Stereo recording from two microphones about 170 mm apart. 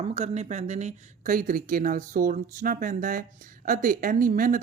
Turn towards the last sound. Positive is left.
turn(degrees=-55)  # may be behind; listen again after turning